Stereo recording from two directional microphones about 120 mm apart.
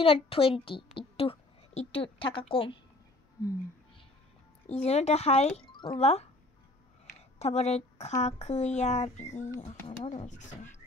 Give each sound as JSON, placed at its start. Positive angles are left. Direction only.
{"t": 0.0, "sound": "a woman's voice", "side_deg": 50}
{"t": 4.6, "sound": "speech", "side_deg": 65}
{"t": 5.7, "sound": "music", "side_deg": 40}
{"t": 5.9, "sound": "speech", "side_deg": 60}
{"t": 7.3, "sound": "speech", "side_deg": 65}
{"t": 9.6, "sound": "speech", "side_deg": 70}